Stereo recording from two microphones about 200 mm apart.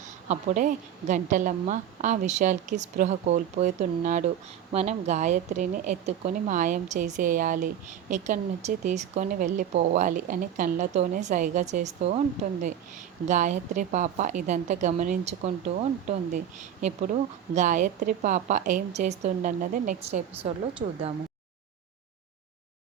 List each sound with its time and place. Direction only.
0.3 s speech: 40° right (ahead or behind)
13.2 s speech: 35° right (ahead or behind)